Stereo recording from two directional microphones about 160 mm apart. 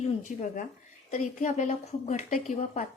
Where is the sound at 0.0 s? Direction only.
45° left (ahead or behind).